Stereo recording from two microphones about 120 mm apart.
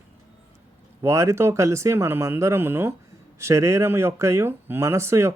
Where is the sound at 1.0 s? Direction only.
25° right (ahead or behind).